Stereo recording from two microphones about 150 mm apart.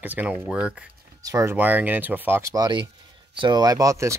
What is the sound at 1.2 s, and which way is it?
Speech, 20° right (ahead or behind).